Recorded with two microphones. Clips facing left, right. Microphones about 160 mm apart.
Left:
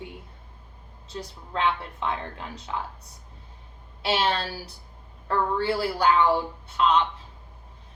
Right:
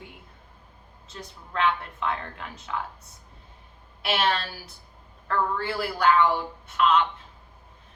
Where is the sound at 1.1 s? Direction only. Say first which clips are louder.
Left 4 dB; 30° left (ahead or behind).